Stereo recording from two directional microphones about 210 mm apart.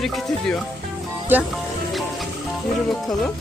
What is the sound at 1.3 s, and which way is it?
Music, 5° right (ahead or behind).